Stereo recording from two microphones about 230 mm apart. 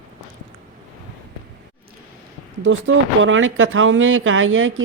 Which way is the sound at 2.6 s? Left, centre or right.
Right.